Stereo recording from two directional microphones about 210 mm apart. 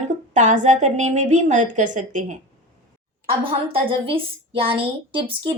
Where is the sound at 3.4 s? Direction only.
25° right (ahead or behind).